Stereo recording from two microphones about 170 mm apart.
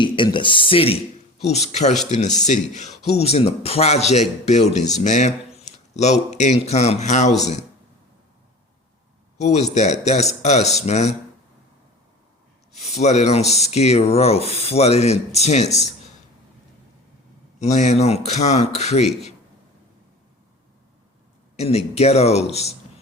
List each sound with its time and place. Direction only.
0.0 s speech: 30° left (ahead or behind)
9.4 s speech: 40° left (ahead or behind)
12.7 s speech: 40° left (ahead or behind)
17.6 s speech: 40° left (ahead or behind)
21.5 s speech: 35° left (ahead or behind)